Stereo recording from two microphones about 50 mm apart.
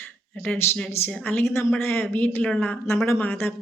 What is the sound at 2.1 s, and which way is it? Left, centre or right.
Speech, left.